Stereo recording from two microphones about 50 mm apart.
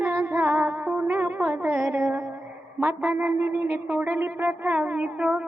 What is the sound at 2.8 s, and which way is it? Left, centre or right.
A man's voice, right.